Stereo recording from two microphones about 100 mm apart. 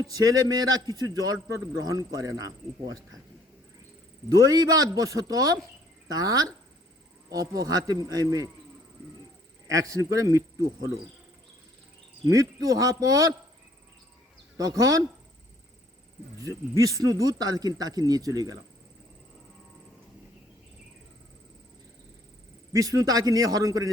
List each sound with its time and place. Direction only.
0.0 s speech: 35° right (ahead or behind)
4.3 s speech: 40° right (ahead or behind)
9.6 s speech: 35° right (ahead or behind)
12.3 s speech: 35° right (ahead or behind)
14.6 s speech: 35° right (ahead or behind)
16.4 s speech: 35° right (ahead or behind)
22.7 s speech: 35° right (ahead or behind)